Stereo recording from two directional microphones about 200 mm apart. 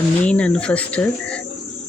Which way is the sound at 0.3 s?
5° left (ahead or behind).